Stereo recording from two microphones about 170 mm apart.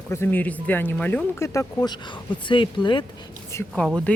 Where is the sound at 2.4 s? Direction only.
30° left (ahead or behind).